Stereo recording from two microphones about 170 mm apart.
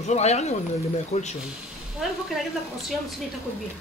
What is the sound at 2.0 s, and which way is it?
Speech, centre (ahead or behind).